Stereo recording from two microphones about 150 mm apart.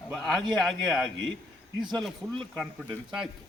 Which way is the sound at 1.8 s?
30° right (ahead or behind).